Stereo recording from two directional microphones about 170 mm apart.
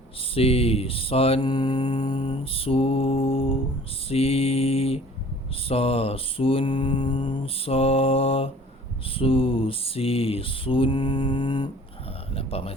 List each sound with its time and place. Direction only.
0.2 s mantra: 35° left (ahead or behind)